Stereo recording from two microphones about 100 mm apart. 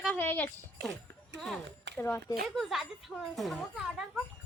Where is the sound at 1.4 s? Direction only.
5° left (ahead or behind).